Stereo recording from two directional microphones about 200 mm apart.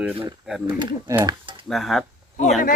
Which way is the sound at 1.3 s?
25° right (ahead or behind).